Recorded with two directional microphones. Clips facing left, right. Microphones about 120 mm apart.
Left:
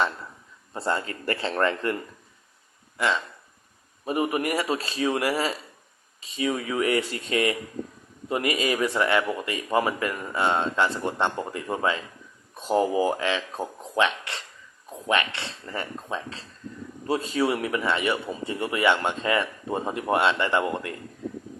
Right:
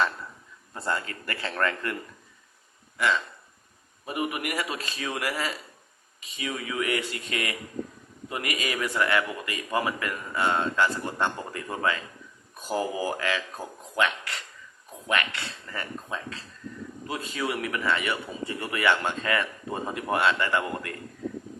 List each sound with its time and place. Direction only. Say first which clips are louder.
0.7 s speech: left 3 dB; 25° left (ahead or behind)
4.0 s speech: left 5 dB; 30° left (ahead or behind)